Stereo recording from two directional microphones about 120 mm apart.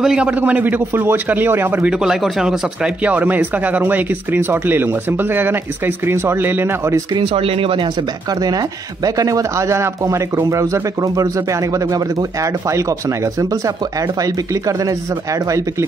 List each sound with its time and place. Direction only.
0.0 s a man's voice: 5° right (ahead or behind)
7.2 s speech: 50° right (ahead or behind)
8.3 s speech: 30° right (ahead or behind)